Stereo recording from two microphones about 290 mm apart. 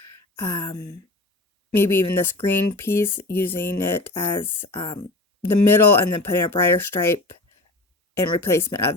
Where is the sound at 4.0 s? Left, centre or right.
Left.